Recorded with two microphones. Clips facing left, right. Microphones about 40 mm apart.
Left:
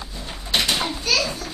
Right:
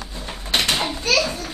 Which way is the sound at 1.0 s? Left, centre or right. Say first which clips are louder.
Right 4 dB; right.